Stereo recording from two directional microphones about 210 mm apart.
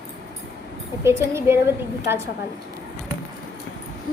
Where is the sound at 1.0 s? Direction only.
15° right (ahead or behind).